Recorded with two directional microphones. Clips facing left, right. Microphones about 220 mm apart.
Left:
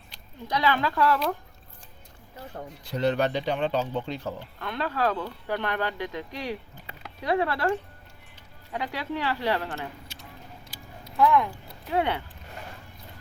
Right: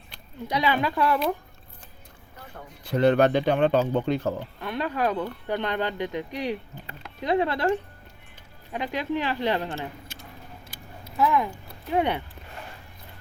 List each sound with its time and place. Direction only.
0.4 s speech: 15° right (ahead or behind)
2.8 s speech: 55° right (ahead or behind)
4.6 s speech: 15° right (ahead or behind)
8.7 s speech: 20° right (ahead or behind)
10.1 s a sound: 50° right (ahead or behind)
11.2 s speech: 5° right (ahead or behind)
11.9 s speech: 20° right (ahead or behind)